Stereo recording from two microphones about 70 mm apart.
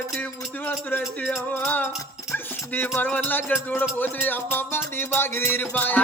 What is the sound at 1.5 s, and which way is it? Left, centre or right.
Music, left.